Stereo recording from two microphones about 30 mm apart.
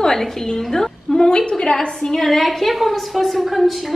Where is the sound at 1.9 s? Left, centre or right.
Centre.